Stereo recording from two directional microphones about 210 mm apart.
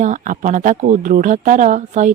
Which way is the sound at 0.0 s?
35° right (ahead or behind).